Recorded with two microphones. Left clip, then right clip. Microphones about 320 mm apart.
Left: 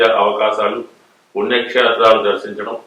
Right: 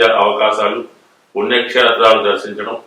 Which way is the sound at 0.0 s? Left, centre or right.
Centre.